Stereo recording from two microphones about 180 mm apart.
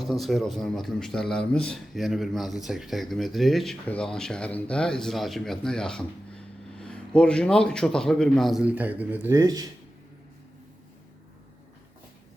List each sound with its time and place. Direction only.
0.0 s speech: centre (ahead or behind); by 9.6 s 20° right (ahead or behind)